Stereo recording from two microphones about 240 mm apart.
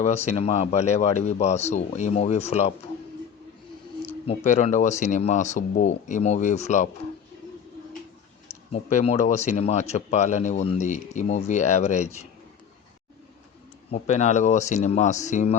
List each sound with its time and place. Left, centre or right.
0.0 s speech: left
4.3 s speech: left
8.7 s speech: left
13.9 s speech: left